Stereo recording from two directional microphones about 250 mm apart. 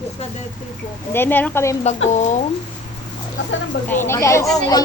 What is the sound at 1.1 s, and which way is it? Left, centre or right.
Speech, centre.